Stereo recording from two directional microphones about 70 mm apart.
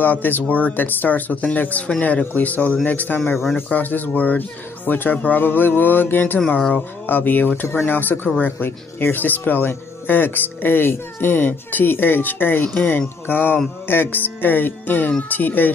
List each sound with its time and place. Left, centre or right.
0.0 s speech: left